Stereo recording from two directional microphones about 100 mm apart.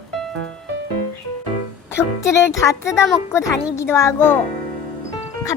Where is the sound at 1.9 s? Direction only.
25° left (ahead or behind).